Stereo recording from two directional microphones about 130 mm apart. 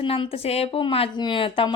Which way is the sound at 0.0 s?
45° left (ahead or behind).